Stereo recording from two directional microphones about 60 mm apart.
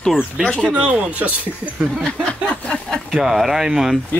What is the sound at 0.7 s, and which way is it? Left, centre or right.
Speech, right.